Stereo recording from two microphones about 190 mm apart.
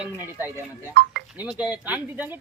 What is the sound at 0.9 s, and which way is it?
Chink, 55° right (ahead or behind).